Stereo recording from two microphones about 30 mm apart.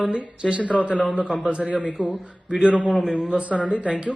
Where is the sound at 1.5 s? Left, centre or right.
Right.